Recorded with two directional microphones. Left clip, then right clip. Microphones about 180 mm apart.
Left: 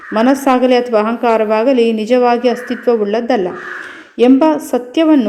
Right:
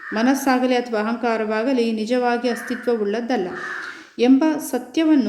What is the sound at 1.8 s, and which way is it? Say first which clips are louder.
Speech: left 9 dB; 30° right (ahead or behind).